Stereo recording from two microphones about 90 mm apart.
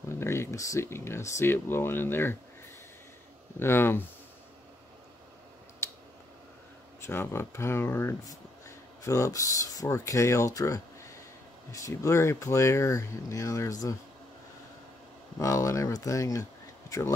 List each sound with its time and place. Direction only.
0.1 s speech: 30° left (ahead or behind)
3.5 s speech: 25° left (ahead or behind)
7.0 s speech: 25° left (ahead or behind)
15.3 s speech: 35° left (ahead or behind)